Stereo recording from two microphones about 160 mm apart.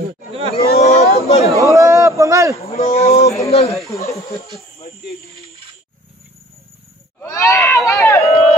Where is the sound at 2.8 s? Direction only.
40° left (ahead or behind).